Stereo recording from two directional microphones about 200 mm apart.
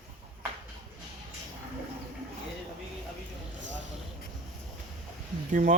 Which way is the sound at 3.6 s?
65° right (ahead or behind).